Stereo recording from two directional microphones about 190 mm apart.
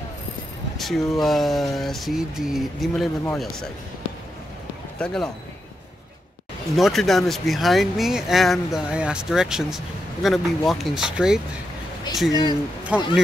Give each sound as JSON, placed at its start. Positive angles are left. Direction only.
{"t": 0.7, "sound": "speech", "side_deg": 0}
{"t": 4.9, "sound": "a man's voice", "side_deg": 5}
{"t": 6.8, "sound": "speech", "side_deg": 0}
{"t": 12.3, "sound": "speech", "side_deg": 20}
{"t": 12.8, "sound": "speech", "side_deg": -5}